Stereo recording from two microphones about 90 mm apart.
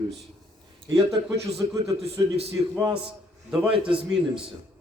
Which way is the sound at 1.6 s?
45° right (ahead or behind).